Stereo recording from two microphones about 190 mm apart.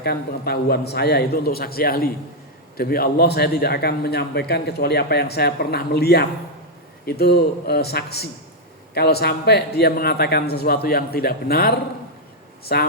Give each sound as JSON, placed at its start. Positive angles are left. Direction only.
{"t": 0.0, "sound": "a man's voice", "side_deg": 55}